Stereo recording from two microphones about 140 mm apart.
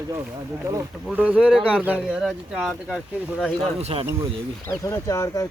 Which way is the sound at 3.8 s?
50° right (ahead or behind).